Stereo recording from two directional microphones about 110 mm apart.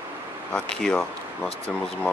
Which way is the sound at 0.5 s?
10° left (ahead or behind).